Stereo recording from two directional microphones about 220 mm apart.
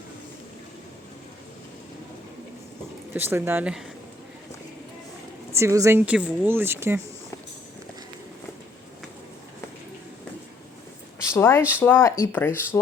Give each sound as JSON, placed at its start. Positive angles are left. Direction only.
{"t": 3.1, "sound": "speech", "side_deg": -10}
{"t": 5.5, "sound": "speech", "side_deg": -15}
{"t": 11.3, "sound": "speech", "side_deg": 10}